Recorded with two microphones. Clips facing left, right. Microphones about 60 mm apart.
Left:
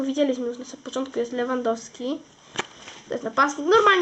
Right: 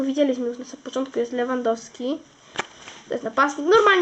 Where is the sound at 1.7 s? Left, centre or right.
Centre.